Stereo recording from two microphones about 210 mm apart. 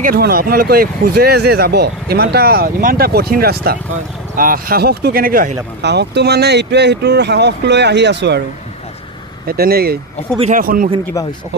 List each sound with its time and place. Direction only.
0.0 s speech: 45° right (ahead or behind)
9.5 s speech: 45° right (ahead or behind)